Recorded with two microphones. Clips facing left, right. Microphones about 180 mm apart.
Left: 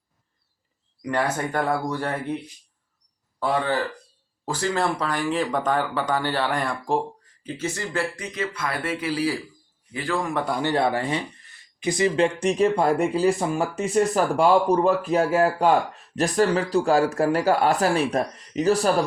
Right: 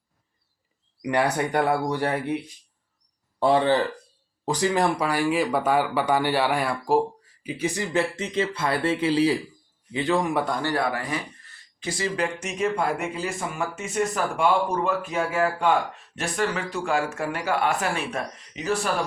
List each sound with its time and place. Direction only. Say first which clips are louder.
1.0 s speech: right 2 dB; 15° right (ahead or behind)
3.4 s speech: right 4 dB; 25° right (ahead or behind)
10.6 s speech: left 3 dB; 25° left (ahead or behind)